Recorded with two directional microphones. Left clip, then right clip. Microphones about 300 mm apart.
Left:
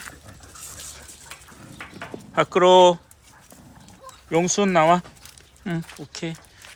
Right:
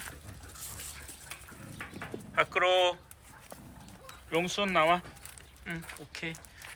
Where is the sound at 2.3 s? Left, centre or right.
Centre.